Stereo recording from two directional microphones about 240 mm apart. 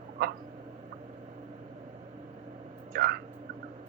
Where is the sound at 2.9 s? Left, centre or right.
Right.